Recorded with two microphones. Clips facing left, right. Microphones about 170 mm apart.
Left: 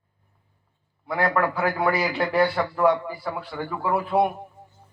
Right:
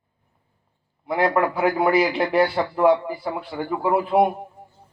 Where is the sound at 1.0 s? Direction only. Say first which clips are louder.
Right 3 dB; 20° right (ahead or behind).